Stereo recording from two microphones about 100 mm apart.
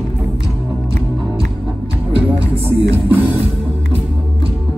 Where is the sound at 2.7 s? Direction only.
20° right (ahead or behind).